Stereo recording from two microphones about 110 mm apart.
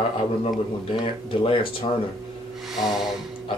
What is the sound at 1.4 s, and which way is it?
Speech, 55° left (ahead or behind).